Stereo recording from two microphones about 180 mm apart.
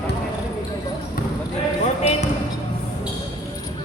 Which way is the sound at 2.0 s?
35° left (ahead or behind).